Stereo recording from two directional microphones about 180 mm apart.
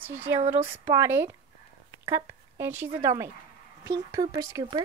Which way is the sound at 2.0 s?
15° right (ahead or behind).